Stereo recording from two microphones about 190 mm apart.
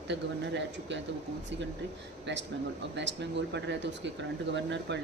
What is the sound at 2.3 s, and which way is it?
Speech, 70° right (ahead or behind).